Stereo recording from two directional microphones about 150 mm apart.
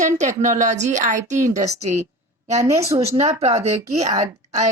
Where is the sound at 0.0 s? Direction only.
55° right (ahead or behind).